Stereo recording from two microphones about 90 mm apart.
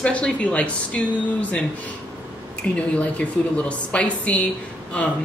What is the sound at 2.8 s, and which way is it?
A woman's voice, 15° left (ahead or behind).